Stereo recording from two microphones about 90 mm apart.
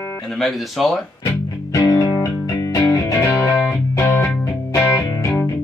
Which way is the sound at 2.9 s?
25° left (ahead or behind).